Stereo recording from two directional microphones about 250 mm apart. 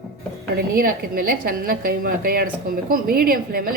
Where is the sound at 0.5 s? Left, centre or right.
Right.